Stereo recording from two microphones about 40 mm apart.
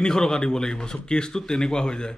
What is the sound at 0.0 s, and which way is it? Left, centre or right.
A man's voice, centre.